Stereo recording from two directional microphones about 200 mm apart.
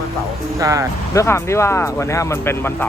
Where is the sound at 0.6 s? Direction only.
15° right (ahead or behind).